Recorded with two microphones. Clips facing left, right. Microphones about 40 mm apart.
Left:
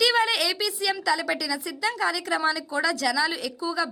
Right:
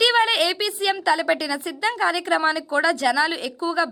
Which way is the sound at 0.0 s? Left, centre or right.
Right.